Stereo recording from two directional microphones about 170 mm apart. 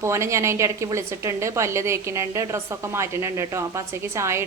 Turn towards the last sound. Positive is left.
turn(degrees=-15)  # may be behind; listen again after turning